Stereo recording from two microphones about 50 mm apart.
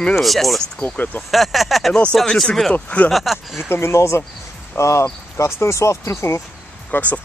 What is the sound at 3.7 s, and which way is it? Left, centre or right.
Speech, left.